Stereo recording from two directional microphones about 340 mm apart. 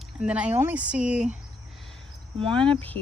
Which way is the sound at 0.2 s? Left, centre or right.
Centre.